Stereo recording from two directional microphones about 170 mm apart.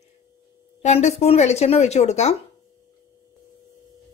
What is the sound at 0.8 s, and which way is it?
Speech, 40° left (ahead or behind).